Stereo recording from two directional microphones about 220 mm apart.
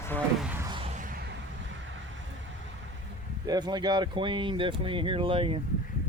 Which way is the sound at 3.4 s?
20° right (ahead or behind).